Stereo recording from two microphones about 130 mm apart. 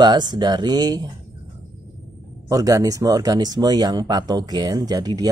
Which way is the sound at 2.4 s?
25° right (ahead or behind).